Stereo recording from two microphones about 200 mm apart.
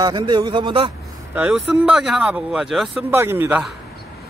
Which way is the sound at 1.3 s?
5° right (ahead or behind).